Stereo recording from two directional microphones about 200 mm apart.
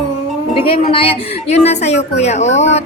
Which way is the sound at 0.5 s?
25° left (ahead or behind).